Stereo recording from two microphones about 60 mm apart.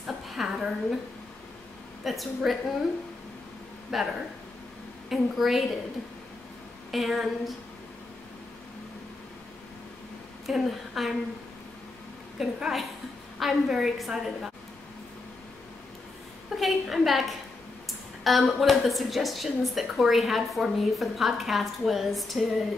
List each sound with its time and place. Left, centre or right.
0.0 s a sound: centre
2.0 s a woman's voice: centre
3.9 s a woman's voice: centre
6.9 s a woman's voice: centre
10.4 s a woman's voice: centre
12.4 s a woman's voice: centre
16.4 s a woman's voice: centre